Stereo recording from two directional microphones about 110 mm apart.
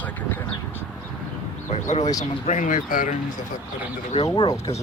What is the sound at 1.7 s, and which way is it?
Speech, 90° left.